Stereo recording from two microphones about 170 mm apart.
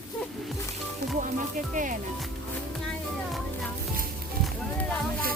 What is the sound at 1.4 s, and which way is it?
Speech, 50° right (ahead or behind).